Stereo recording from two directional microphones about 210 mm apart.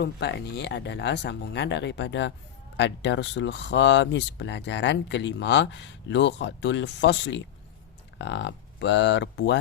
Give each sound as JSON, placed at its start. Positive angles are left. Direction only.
{"t": 0.0, "sound": "speech", "side_deg": 50}